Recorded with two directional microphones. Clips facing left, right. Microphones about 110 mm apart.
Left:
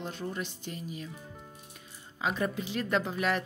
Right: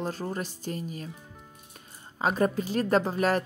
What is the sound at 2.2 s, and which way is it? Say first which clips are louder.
Speech: right 6 dB; 45° right (ahead or behind).